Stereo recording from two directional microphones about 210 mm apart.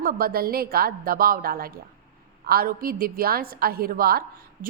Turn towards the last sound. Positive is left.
turn(degrees=-45)  # may be behind; listen again after turning